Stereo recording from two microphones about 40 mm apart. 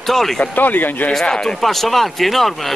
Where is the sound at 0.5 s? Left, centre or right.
Left.